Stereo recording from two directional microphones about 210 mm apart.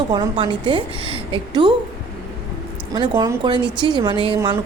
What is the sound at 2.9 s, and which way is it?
Speech, 20° right (ahead or behind).